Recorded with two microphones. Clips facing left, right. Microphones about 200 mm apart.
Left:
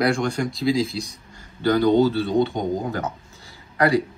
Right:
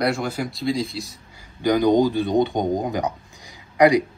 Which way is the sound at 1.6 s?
15° right (ahead or behind).